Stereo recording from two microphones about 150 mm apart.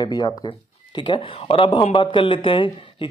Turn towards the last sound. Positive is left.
turn(degrees=35)  # may be behind; listen again after turning